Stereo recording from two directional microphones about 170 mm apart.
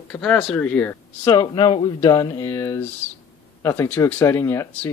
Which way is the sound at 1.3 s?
25° left (ahead or behind).